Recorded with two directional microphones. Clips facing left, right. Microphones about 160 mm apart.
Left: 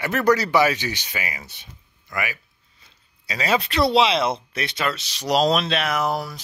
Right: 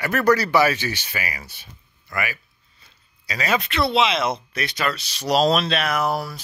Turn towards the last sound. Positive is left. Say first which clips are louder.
# right 1 dB
turn(degrees=20)  # may be behind; listen again after turning